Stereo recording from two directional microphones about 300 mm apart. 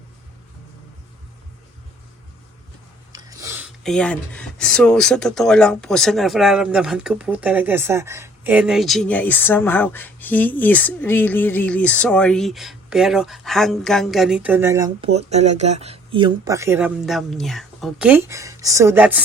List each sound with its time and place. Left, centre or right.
3.1 s speech: centre